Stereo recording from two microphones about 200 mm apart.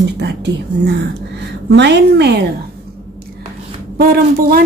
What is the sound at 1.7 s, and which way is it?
Speech, 60° right (ahead or behind).